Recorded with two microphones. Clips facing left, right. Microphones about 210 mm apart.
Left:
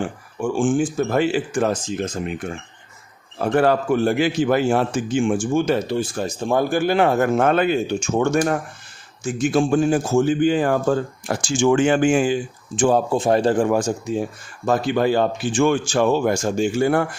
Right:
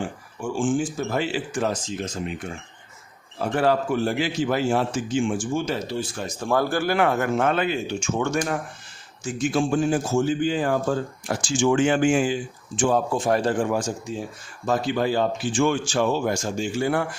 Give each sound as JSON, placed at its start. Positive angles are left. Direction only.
{"t": 0.3, "sound": "a man's voice", "side_deg": 55}
{"t": 6.2, "sound": "a man's voice", "side_deg": 20}
{"t": 13.1, "sound": "a man's voice", "side_deg": 25}
{"t": 13.7, "sound": "speech", "side_deg": 50}
{"t": 14.7, "sound": "a man's voice", "side_deg": 60}